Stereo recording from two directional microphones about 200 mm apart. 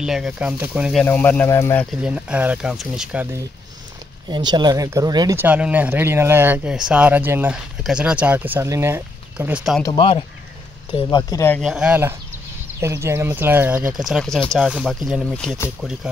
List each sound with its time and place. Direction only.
0.0 s speech: 5° right (ahead or behind)
1.0 s speech: 10° left (ahead or behind)
2.0 s speech: 5° right (ahead or behind)
4.3 s speech: 20° right (ahead or behind); by 9.8 s 5° right (ahead or behind)
9.8 s speech: 25° left (ahead or behind); by 11.7 s 10° left (ahead or behind)
11.7 s speech: 5° right (ahead or behind)